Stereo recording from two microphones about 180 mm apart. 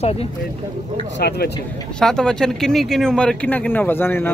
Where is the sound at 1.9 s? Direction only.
5° left (ahead or behind).